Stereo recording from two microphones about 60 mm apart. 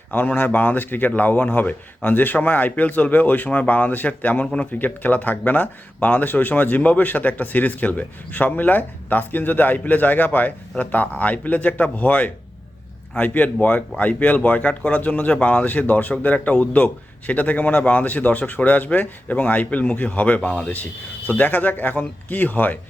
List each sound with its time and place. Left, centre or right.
0.1 s speech: left